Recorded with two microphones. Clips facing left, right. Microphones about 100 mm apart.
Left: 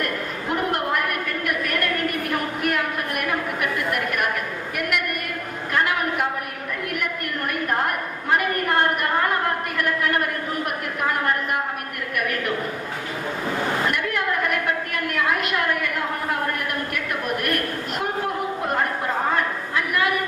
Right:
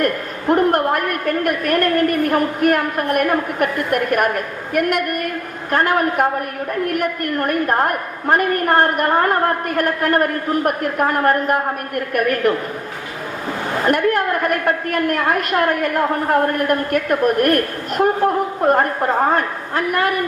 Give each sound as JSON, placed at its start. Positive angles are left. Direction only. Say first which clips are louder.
{"t": 0.0, "sound": "a woman's voice", "louder": "right 7 dB", "side_deg": -45}
{"t": 13.8, "sound": "a woman's voice", "louder": "right 8 dB", "side_deg": -45}